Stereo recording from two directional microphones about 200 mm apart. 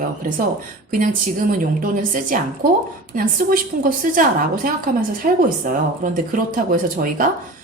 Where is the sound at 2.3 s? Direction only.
45° right (ahead or behind).